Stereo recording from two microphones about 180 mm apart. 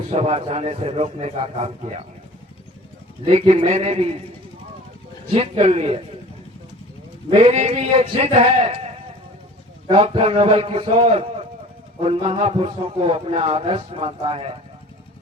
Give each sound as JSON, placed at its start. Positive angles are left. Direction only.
{"t": 0.1, "sound": "a man's voice", "side_deg": -35}
{"t": 3.2, "sound": "a man's voice", "side_deg": -35}
{"t": 5.3, "sound": "a man's voice", "side_deg": -35}
{"t": 7.3, "sound": "a man's voice", "side_deg": -35}
{"t": 9.9, "sound": "a man's voice", "side_deg": -30}